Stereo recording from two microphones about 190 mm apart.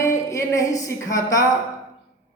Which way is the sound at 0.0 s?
15° left (ahead or behind).